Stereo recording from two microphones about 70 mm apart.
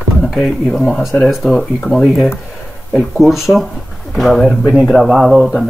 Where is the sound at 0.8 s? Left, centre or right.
Centre.